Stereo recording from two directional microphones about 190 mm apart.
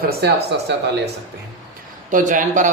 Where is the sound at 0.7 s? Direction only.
65° right (ahead or behind).